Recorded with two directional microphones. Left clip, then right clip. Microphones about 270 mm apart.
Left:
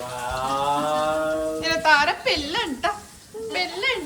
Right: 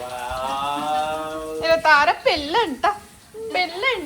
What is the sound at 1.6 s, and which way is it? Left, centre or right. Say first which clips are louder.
A woman's voice: right 4 dB; centre.